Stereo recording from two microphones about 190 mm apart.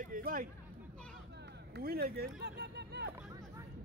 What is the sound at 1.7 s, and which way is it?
Speech, 55° right (ahead or behind).